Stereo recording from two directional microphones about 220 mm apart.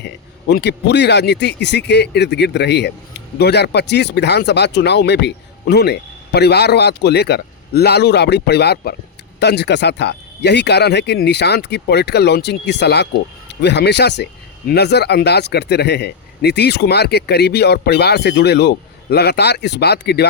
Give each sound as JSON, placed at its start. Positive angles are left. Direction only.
{"t": 0.0, "sound": "speech", "side_deg": 50}